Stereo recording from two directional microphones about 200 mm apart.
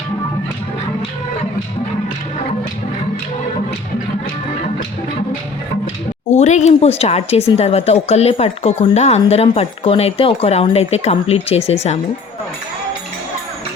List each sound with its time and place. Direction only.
6.3 s a woman's voice: 35° left (ahead or behind)